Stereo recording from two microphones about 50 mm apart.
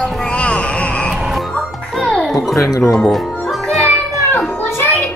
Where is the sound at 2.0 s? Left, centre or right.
Centre.